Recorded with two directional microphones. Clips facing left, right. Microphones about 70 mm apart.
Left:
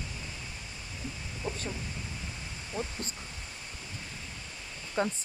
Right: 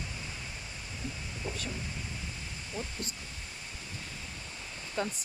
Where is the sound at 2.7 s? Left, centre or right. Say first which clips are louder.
Left 4 dB; left.